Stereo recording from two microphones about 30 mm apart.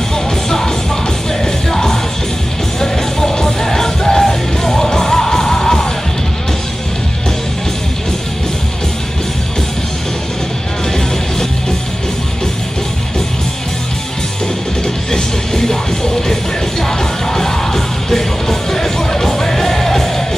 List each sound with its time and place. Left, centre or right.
0.5 s music: centre
15.0 s music: centre